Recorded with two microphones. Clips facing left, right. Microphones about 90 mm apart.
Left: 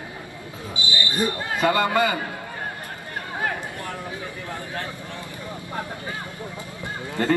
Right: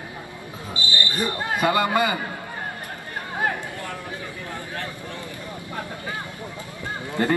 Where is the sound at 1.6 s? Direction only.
15° right (ahead or behind).